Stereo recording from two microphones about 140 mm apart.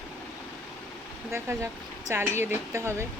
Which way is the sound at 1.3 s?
20° right (ahead or behind).